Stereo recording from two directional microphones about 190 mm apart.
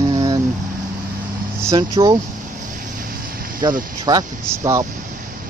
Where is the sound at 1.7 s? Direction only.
20° right (ahead or behind).